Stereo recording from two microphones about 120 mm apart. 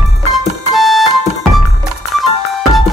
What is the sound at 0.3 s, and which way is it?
Music, centre (ahead or behind).